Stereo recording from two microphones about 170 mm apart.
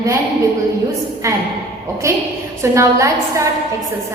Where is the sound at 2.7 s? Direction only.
20° right (ahead or behind).